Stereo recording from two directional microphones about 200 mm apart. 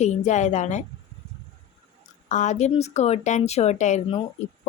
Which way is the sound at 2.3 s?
35° left (ahead or behind).